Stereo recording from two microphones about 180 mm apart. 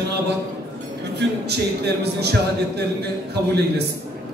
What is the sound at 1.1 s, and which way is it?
Speech, 65° right (ahead or behind).